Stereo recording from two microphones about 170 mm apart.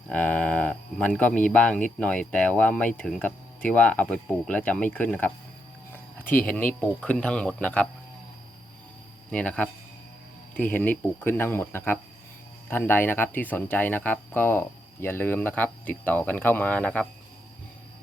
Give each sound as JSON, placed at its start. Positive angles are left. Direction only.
{"t": 0.1, "sound": "speech", "side_deg": 10}
{"t": 9.3, "sound": "speech", "side_deg": 5}